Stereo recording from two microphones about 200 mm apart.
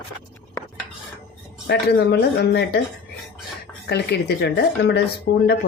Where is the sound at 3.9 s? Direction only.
55° left (ahead or behind).